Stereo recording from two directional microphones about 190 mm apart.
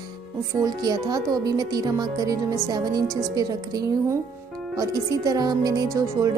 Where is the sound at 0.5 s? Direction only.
20° right (ahead or behind).